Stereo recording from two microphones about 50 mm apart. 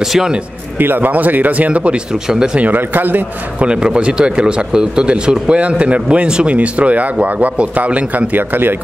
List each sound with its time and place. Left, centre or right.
0.7 s speech: right
2.2 s speech: centre
2.6 s speech: right
3.6 s a man's voice: centre
8.4 s speech: right